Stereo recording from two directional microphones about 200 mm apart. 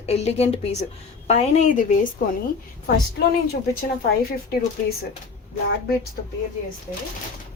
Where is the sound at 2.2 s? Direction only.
40° left (ahead or behind).